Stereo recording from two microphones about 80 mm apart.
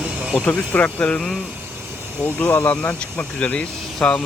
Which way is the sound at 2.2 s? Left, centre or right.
Left.